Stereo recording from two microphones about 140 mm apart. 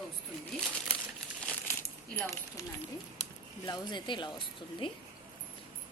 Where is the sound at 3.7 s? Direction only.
30° left (ahead or behind).